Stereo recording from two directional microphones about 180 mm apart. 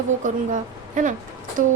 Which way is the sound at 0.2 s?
45° right (ahead or behind).